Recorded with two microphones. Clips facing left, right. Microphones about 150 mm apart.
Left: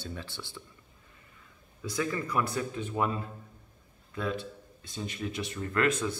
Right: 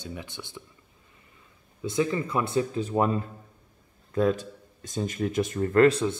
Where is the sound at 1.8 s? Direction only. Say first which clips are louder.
Right 6 dB; 25° right (ahead or behind).